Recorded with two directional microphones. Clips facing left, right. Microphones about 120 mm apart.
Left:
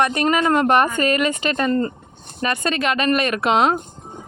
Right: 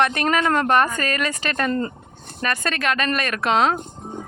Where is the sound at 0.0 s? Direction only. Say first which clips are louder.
Left 2 dB; 5° left (ahead or behind).